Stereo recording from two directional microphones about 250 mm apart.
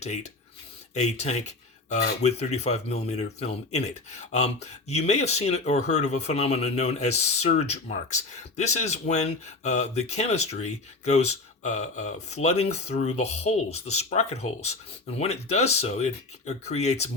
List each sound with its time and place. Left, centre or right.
0.9 s speech: left